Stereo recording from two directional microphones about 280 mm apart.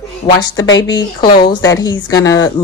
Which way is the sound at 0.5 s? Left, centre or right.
Left.